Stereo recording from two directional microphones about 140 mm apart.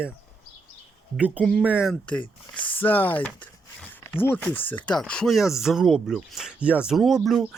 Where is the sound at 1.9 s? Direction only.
10° left (ahead or behind).